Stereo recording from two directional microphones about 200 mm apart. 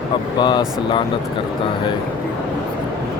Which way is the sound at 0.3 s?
20° left (ahead or behind).